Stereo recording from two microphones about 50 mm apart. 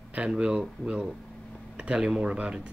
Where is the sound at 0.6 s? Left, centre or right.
Centre.